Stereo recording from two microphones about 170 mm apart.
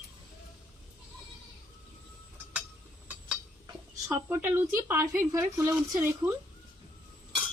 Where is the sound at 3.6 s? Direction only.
15° right (ahead or behind).